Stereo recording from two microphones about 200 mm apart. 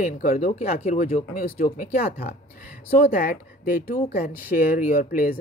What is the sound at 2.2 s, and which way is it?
Speech, 50° left (ahead or behind).